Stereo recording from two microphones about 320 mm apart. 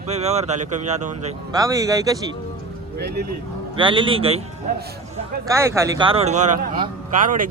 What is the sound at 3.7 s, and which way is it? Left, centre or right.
Speech, centre.